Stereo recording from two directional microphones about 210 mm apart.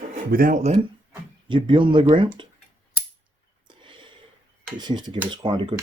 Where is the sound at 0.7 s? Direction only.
20° right (ahead or behind).